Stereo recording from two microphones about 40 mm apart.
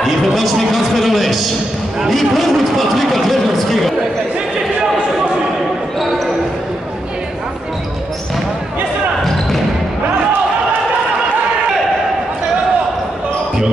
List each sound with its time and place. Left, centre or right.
0.0 s a man's voice: centre
5.9 s basketball bounce: centre